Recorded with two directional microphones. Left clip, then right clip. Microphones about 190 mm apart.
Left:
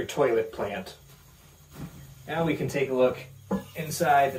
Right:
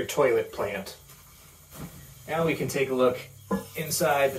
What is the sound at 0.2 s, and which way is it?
Speech, centre (ahead or behind).